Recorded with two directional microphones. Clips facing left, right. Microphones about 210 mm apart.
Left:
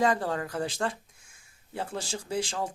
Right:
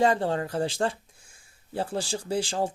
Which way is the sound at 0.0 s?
25° right (ahead or behind).